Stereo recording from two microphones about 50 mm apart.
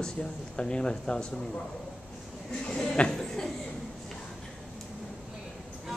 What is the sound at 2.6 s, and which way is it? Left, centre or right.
Speech, centre.